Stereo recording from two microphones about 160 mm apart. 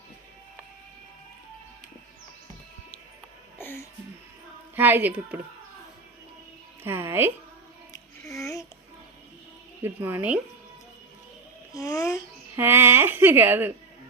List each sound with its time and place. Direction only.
3.6 s a sound: 15° left (ahead or behind)
4.7 s speech: 10° right (ahead or behind)
6.8 s music: 15° right (ahead or behind)
8.3 s a sound: 20° left (ahead or behind)
9.8 s speech: 10° right (ahead or behind)
11.7 s a child's voice: 20° left (ahead or behind)
12.5 s speech: 15° right (ahead or behind)